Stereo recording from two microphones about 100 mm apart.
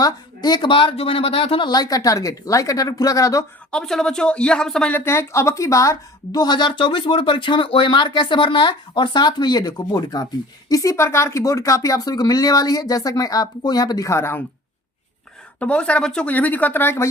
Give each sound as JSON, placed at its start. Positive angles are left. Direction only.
{"t": 0.0, "sound": "speech", "side_deg": 45}
{"t": 1.7, "sound": "speech", "side_deg": 40}
{"t": 3.7, "sound": "speech", "side_deg": 5}
{"t": 4.9, "sound": "a woman's voice", "side_deg": 20}
{"t": 14.1, "sound": "speech", "side_deg": 25}
{"t": 15.5, "sound": "speech", "side_deg": 10}